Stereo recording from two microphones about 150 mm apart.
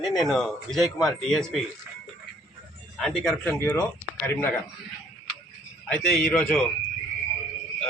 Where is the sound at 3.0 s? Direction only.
5° left (ahead or behind).